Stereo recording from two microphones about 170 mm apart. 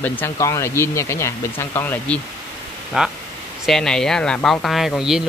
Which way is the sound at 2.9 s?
5° right (ahead or behind).